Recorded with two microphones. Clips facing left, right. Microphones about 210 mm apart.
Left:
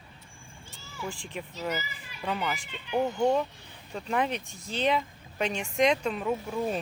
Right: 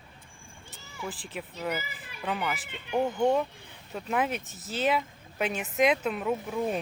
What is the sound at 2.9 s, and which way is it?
Speech, 10° left (ahead or behind).